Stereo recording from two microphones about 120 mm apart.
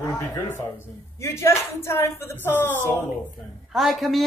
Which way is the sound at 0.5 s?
20° left (ahead or behind).